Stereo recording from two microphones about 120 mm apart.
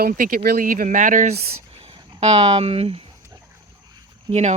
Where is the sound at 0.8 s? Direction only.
90° right.